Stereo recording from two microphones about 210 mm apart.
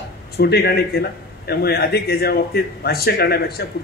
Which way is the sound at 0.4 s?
50° left (ahead or behind).